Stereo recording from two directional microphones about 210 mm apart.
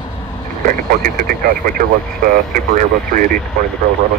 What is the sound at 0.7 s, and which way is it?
Speech, 45° right (ahead or behind).